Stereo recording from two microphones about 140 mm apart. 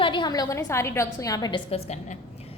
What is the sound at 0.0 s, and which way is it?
A woman's voice, 35° left (ahead or behind).